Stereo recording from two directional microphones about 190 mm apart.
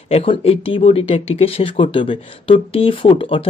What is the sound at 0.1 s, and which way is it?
Speech, 30° left (ahead or behind).